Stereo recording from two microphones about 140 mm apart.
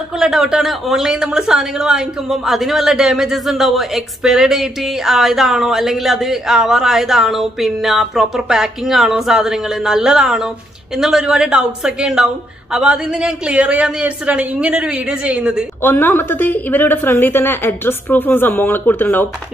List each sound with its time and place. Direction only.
0.2 s a woman's voice: 5° right (ahead or behind)
15.8 s a woman's voice: 15° left (ahead or behind)